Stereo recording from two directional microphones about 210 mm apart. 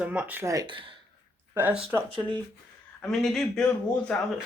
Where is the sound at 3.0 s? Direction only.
Centre (ahead or behind).